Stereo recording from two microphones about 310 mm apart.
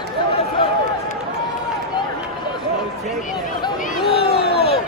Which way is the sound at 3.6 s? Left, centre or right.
Centre.